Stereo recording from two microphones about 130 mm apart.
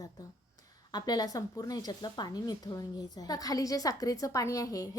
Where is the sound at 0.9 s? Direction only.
30° left (ahead or behind).